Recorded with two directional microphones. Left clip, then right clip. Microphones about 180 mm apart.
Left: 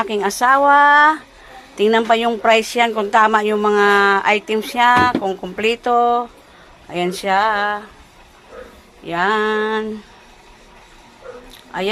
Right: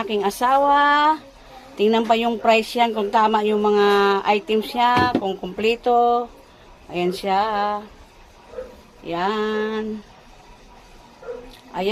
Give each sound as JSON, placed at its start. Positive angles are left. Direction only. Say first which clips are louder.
{"t": 0.0, "sound": "speech", "louder": "left 4 dB", "side_deg": 10}
{"t": 9.0, "sound": "a sound", "louder": "left 5 dB", "side_deg": 20}
{"t": 11.7, "sound": "speech", "louder": "left 2 dB", "side_deg": 15}